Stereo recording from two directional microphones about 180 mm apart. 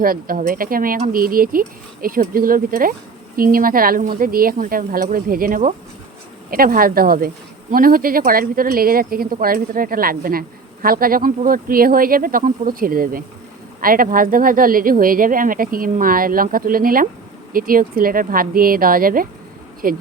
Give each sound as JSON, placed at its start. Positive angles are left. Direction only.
{"t": 0.0, "sound": "speech", "side_deg": -50}